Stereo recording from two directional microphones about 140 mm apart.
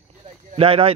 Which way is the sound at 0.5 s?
45° right (ahead or behind).